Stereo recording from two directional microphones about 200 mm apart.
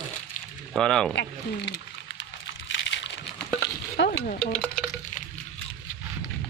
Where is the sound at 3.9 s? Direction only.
55° left (ahead or behind).